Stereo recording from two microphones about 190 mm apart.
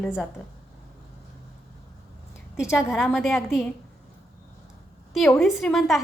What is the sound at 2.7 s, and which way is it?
Speech, centre (ahead or behind).